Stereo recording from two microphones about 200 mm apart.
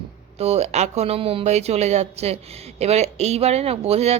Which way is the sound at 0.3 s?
30° right (ahead or behind).